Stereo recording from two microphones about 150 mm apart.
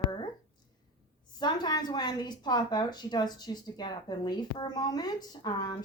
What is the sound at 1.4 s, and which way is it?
A woman's voice, 30° left (ahead or behind).